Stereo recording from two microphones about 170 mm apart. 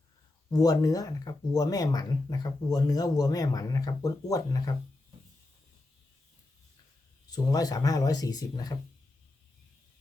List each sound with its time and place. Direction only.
0.5 s speech: 20° left (ahead or behind)
7.3 s speech: 20° left (ahead or behind)